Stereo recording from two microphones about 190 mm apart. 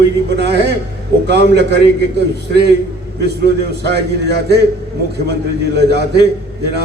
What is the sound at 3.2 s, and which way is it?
A man's voice, 60° right (ahead or behind).